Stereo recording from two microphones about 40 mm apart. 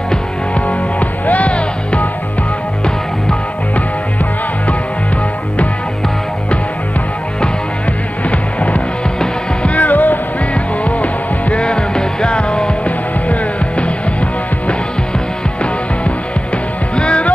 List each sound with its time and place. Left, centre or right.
0.6 s music: left
8.3 s music: left
9.8 s music: left
11.6 s music: left
12.8 s music: left
16.9 s music: left